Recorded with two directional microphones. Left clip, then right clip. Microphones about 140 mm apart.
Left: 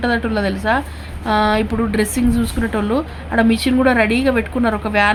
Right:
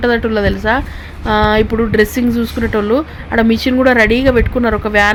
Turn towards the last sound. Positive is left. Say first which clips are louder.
# right 4 dB
turn(degrees=-10)  # may be behind; listen again after turning